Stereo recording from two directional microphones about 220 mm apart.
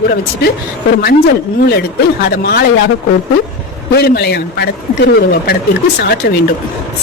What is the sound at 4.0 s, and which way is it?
A man's voice, 45° left (ahead or behind).